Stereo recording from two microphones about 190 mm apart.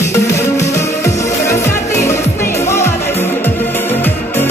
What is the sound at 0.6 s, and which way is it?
Music, 15° left (ahead or behind).